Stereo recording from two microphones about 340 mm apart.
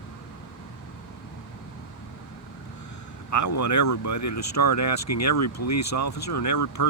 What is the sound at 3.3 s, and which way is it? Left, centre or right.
Speech, left.